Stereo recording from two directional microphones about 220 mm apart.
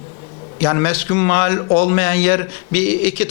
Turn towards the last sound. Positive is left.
turn(degrees=10)  # may be behind; listen again after turning